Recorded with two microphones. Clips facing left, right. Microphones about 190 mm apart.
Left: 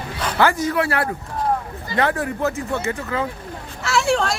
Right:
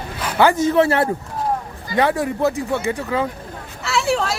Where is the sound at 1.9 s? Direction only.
15° right (ahead or behind).